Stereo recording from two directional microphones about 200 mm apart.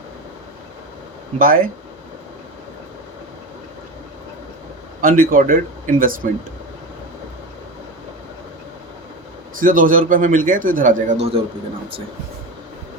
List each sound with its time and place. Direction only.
1.4 s a man's voice: 45° right (ahead or behind)
4.9 s a man's voice: 45° right (ahead or behind)
9.6 s a man's voice: 45° right (ahead or behind)